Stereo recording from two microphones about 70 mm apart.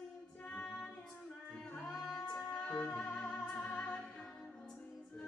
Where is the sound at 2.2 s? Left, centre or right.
Centre.